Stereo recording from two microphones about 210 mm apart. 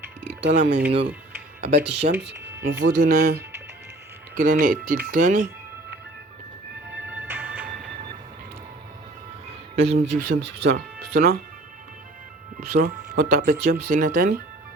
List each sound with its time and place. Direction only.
0.4 s speech: 55° right (ahead or behind)
1.7 s speech: 55° right (ahead or behind)
2.2 s a sound: 50° right (ahead or behind)
2.8 s speech: 40° right (ahead or behind)
7.1 s music: 5° right (ahead or behind)
9.7 s speech: 30° right (ahead or behind)
10.0 s speech: 50° right (ahead or behind)
12.7 s speech: 45° right (ahead or behind)